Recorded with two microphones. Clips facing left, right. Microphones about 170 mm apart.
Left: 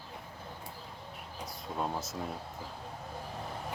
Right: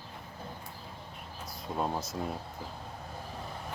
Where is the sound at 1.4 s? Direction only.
Centre (ahead or behind).